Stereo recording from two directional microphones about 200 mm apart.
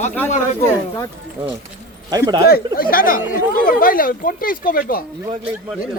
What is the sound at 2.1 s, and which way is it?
Speech, 20° right (ahead or behind).